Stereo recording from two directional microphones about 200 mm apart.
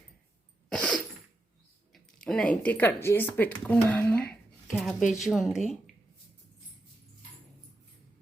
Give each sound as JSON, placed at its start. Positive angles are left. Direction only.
{"t": 0.7, "sound": "cough", "side_deg": 5}
{"t": 1.9, "sound": "speech", "side_deg": 5}